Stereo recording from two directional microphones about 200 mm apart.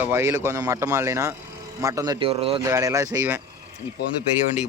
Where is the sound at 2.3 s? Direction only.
30° right (ahead or behind).